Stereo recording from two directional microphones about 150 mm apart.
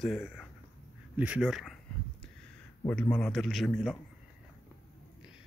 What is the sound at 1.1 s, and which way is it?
Speech, 10° right (ahead or behind).